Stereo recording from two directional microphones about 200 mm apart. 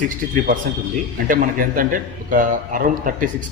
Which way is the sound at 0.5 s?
40° right (ahead or behind).